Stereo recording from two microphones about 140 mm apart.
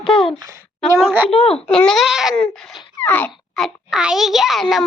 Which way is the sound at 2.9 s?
10° left (ahead or behind).